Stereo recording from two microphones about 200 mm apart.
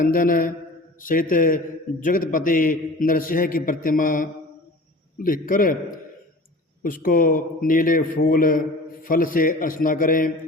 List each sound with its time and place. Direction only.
0.0 s a man's voice: 45° left (ahead or behind)
6.8 s a man's voice: 45° left (ahead or behind)